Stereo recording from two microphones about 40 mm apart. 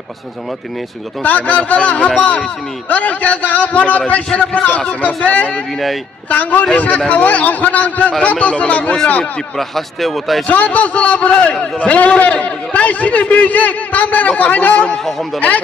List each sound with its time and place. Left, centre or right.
1.2 s a man's voice: left
9.6 s speech: centre
10.4 s a man's voice: left